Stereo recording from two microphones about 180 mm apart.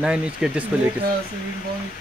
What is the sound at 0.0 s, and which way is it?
Speech, 5° right (ahead or behind).